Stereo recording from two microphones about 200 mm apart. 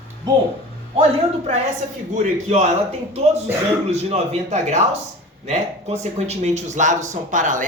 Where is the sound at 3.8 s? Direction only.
30° right (ahead or behind).